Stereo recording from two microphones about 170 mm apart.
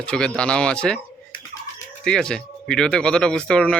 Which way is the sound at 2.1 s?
5° left (ahead or behind).